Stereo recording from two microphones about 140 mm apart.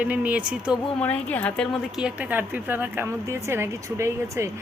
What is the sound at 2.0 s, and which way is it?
Speech, 5° right (ahead or behind).